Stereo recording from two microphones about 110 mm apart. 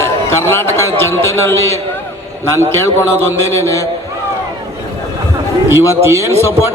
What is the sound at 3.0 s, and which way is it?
Music, 20° left (ahead or behind).